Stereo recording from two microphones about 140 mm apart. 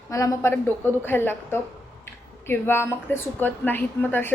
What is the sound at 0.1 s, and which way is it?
A woman's voice, 20° left (ahead or behind).